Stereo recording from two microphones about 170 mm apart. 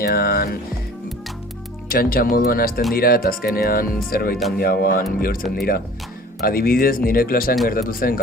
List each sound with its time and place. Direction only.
0.0 s speech: 60° left (ahead or behind)
1.9 s speech: 60° left (ahead or behind)